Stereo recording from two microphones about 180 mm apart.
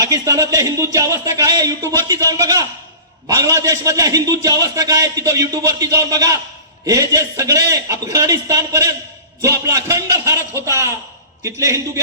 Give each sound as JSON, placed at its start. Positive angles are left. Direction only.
{"t": 0.0, "sound": "a man's voice", "side_deg": -20}